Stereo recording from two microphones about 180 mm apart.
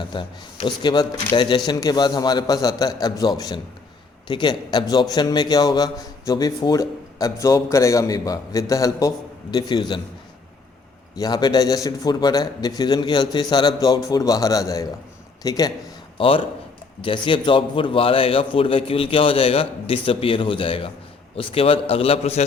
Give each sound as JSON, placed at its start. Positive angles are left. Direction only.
{"t": 0.0, "sound": "a man's voice", "side_deg": 25}
{"t": 11.2, "sound": "a man's voice", "side_deg": 25}